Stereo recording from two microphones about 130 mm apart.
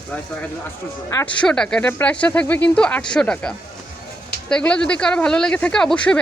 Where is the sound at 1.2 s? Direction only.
10° left (ahead or behind).